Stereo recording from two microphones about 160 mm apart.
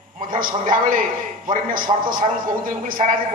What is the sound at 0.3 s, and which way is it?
A man's voice, 55° right (ahead or behind).